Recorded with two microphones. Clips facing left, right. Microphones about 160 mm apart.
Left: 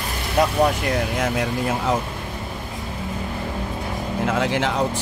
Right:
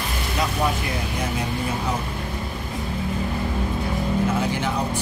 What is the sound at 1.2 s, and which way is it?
Speech, 90° left.